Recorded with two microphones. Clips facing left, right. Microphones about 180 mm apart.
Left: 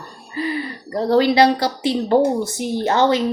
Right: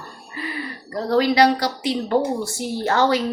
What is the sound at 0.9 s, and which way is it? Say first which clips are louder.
Speech: left 3 dB; 25° left (ahead or behind).